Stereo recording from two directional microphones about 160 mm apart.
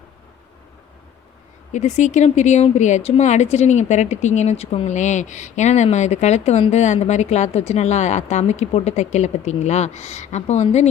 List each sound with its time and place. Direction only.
1.7 s speech: 50° left (ahead or behind)